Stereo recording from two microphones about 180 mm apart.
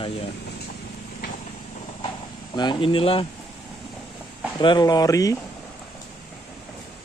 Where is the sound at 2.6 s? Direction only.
25° left (ahead or behind).